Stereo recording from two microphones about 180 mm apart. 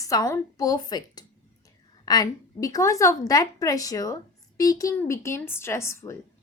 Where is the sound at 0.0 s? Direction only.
20° left (ahead or behind).